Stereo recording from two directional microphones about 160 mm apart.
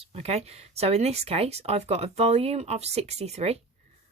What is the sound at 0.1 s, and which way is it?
Speech, 40° right (ahead or behind).